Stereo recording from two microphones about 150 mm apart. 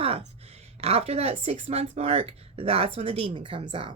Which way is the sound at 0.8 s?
45° right (ahead or behind).